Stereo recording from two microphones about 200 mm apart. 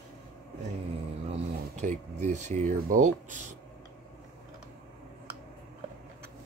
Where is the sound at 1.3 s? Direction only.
35° right (ahead or behind).